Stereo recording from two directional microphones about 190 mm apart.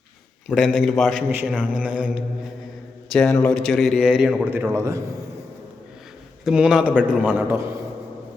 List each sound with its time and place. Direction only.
0.4 s a man's voice: centre (ahead or behind)
1.3 s mantra: 10° right (ahead or behind)
3.2 s a man's voice: 5° left (ahead or behind); by 4.9 s 15° right (ahead or behind)
6.4 s a man's voice: 5° right (ahead or behind)